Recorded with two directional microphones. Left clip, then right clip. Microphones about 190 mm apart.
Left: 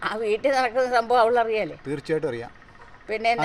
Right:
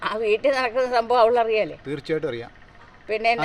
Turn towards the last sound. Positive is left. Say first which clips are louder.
# right 2 dB
turn(degrees=-20)  # may be behind; listen again after turning